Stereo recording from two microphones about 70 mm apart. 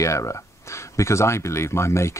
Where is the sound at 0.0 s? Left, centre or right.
Left.